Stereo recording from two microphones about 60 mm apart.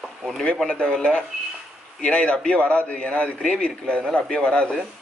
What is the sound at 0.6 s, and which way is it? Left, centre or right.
A man's voice, centre.